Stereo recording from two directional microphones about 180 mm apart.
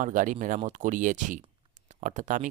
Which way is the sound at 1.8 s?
45° right (ahead or behind).